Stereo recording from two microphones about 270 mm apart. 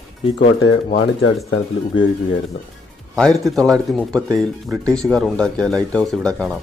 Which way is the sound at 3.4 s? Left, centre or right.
Centre.